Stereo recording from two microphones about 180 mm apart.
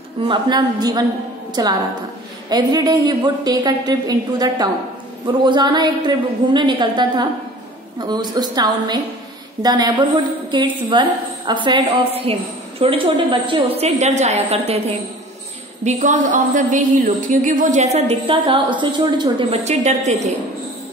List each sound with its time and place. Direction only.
0.3 s a man's voice: 25° right (ahead or behind)
19.6 s a woman's voice: 40° right (ahead or behind)